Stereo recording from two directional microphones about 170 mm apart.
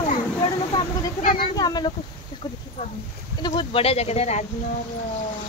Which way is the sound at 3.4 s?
25° left (ahead or behind).